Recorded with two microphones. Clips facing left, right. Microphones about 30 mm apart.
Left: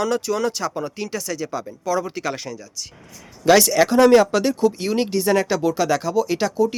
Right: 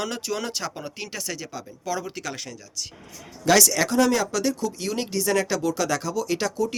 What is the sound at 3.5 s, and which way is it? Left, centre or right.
Speech, centre.